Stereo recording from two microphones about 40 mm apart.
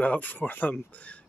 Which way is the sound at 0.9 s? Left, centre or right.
Left.